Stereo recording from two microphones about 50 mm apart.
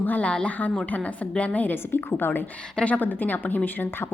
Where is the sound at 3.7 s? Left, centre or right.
Left.